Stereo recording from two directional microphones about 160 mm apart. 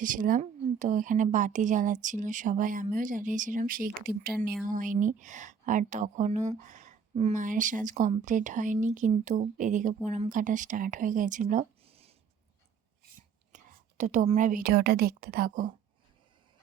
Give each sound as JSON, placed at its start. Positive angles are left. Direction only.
{"t": 0.0, "sound": "speech", "side_deg": -55}
{"t": 11.9, "sound": "a sound", "side_deg": -40}
{"t": 13.5, "sound": "whispering", "side_deg": -50}
{"t": 14.0, "sound": "a woman's voice", "side_deg": -50}